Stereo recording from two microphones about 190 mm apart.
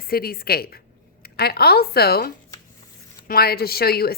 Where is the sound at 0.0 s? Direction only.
50° left (ahead or behind).